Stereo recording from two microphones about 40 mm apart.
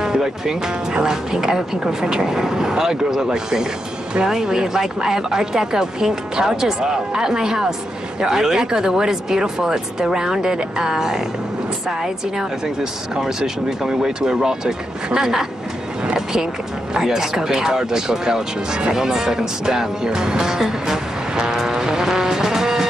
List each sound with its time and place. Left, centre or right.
0.0 s speech: centre
16.9 s speech: centre